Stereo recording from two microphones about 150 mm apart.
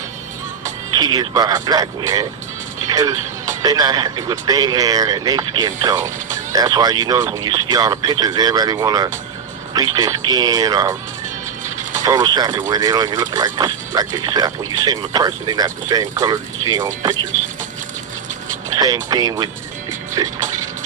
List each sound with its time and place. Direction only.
0.6 s speech: 25° right (ahead or behind)
2.9 s music: 25° right (ahead or behind)
3.6 s speech: 25° right (ahead or behind)
11.6 s music: 55° right (ahead or behind)
12.0 s speech: 30° right (ahead or behind)
19.1 s speech: 25° right (ahead or behind)